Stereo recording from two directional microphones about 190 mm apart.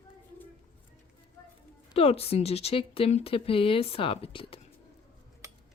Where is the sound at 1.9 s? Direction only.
30° left (ahead or behind).